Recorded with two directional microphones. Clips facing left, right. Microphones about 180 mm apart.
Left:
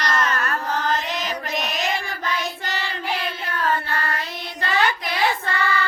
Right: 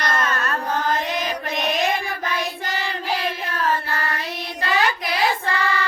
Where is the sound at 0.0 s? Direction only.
55° right (ahead or behind).